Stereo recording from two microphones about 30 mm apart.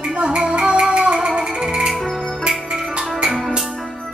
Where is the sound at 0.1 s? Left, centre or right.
Right.